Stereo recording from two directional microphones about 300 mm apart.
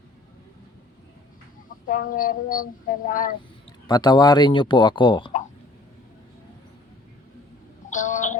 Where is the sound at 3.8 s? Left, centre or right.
Centre.